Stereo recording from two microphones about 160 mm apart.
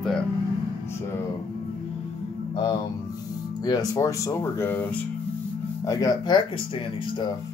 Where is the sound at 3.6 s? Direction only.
25° left (ahead or behind).